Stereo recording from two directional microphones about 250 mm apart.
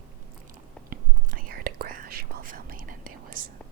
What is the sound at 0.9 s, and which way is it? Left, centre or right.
Whispering, right.